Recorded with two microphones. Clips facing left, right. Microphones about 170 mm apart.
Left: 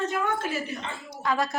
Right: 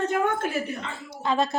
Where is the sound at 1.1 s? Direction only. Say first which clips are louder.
Right 3 dB; 25° right (ahead or behind).